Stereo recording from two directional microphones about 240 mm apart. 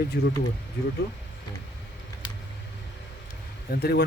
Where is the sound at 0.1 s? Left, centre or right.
Left.